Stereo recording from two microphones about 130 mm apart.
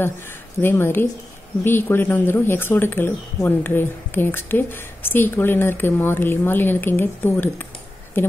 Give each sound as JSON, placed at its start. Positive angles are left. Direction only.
{"t": 0.6, "sound": "speech", "side_deg": 15}